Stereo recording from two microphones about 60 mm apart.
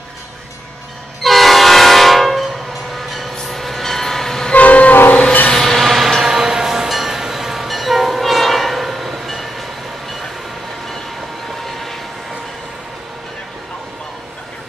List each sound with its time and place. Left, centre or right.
1.2 s train: centre
4.6 s train: left
5.5 s train: centre
11.6 s vehicle: centre